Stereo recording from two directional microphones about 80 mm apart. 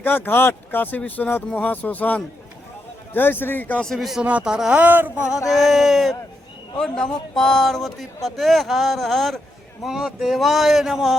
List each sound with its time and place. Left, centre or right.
0.0 s speech: left
3.8 s a man's voice: centre
4.2 s a man's voice: centre
5.5 s a man's voice: centre